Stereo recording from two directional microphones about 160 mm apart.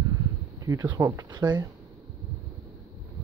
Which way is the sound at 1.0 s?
20° right (ahead or behind).